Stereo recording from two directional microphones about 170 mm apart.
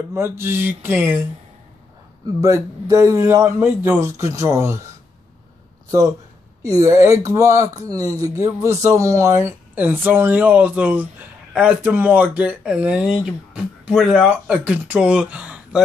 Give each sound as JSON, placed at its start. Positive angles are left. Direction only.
{"t": 0.1, "sound": "speech", "side_deg": -15}
{"t": 2.4, "sound": "speech", "side_deg": -20}
{"t": 6.6, "sound": "speech", "side_deg": -20}